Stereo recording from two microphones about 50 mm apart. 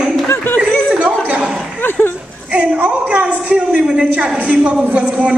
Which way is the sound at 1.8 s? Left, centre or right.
Left.